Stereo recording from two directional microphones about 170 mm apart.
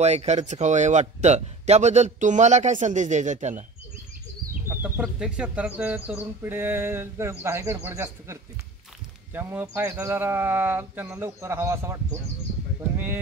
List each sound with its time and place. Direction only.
0.0 s speech: 40° right (ahead or behind)
4.6 s speech: 10° right (ahead or behind)
12.9 s a sound: 10° right (ahead or behind)